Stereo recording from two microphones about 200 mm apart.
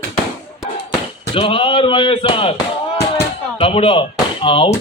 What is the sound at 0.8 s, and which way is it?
Basketball bounce, 30° left (ahead or behind).